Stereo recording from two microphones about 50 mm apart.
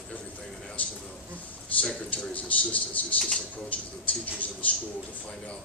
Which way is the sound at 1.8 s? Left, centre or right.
Left.